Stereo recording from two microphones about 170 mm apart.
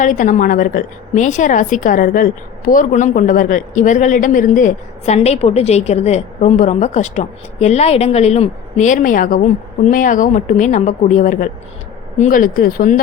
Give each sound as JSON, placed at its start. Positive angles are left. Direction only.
{"t": 0.0, "sound": "a woman's voice", "side_deg": 50}